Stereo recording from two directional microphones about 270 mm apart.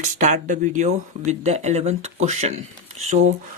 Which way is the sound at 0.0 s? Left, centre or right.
Right.